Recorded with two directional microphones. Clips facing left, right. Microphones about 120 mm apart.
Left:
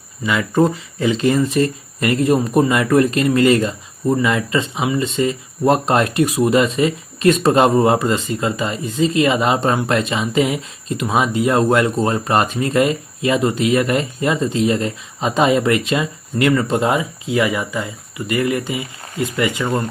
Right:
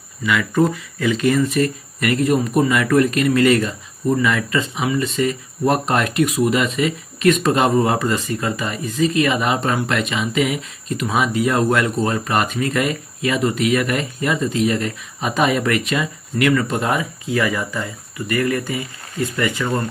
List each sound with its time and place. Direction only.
0.2 s speech: 25° left (ahead or behind)